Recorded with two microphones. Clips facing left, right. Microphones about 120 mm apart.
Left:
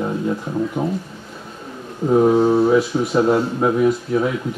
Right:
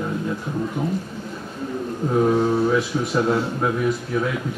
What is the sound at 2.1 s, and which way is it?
A man's voice, 25° left (ahead or behind).